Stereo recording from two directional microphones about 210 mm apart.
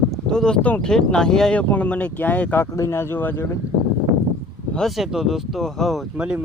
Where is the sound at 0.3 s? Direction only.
5° left (ahead or behind).